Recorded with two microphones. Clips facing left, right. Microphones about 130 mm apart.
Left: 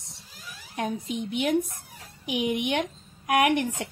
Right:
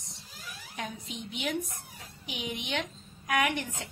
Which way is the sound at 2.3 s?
60° left (ahead or behind).